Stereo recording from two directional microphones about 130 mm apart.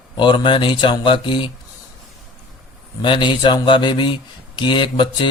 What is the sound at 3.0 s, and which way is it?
Speech, 40° left (ahead or behind).